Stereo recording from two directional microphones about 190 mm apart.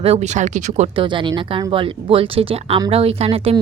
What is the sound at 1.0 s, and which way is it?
Speech, 25° right (ahead or behind).